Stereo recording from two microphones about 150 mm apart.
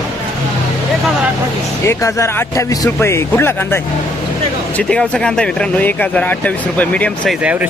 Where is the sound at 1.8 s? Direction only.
20° left (ahead or behind).